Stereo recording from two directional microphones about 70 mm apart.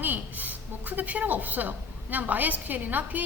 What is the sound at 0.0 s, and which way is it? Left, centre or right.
A woman's voice, right.